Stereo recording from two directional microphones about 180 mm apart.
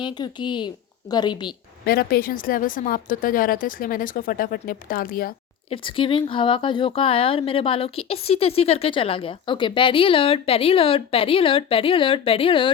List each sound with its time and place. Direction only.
0.0 s speech: 25° left (ahead or behind)
1.8 s a woman's voice: 60° left (ahead or behind)
5.7 s speech: 30° left (ahead or behind)